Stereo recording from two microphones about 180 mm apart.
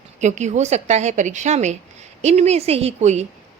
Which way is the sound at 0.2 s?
40° right (ahead or behind).